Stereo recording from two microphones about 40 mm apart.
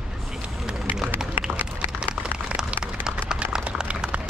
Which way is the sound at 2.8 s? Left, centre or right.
Centre.